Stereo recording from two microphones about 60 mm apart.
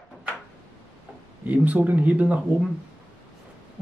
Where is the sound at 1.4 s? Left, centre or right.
Right.